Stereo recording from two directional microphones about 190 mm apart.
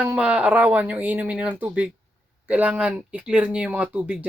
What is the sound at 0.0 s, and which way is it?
Speech, 5° right (ahead or behind).